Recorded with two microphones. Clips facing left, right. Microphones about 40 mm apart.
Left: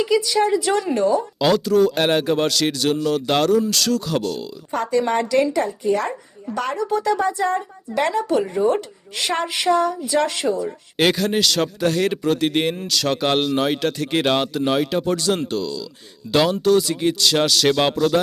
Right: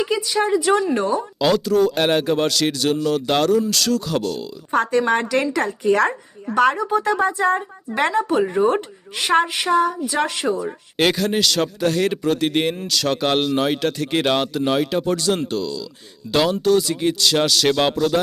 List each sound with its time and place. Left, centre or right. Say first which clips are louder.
0.0 s a woman's voice: left 2 dB; centre
1.4 s speech: even; centre
4.7 s speech: right 2 dB; right
5.5 s speech: right 2 dB; right
6.7 s a woman's voice: right 1 dB; right
9.6 s a woman's voice: even; centre
10.9 s speech: even; centre